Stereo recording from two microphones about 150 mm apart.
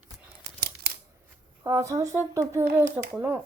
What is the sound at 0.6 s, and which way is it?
Scissors, 90° right.